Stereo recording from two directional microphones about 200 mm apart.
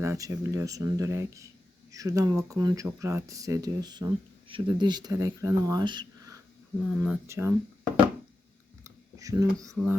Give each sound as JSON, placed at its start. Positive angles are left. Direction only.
{"t": 0.0, "sound": "speech", "side_deg": -15}
{"t": 6.9, "sound": "speech", "side_deg": -5}
{"t": 9.1, "sound": "speech", "side_deg": -15}
{"t": 9.7, "sound": "a sound", "side_deg": -5}